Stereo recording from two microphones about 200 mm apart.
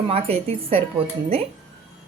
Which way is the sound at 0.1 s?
30° right (ahead or behind).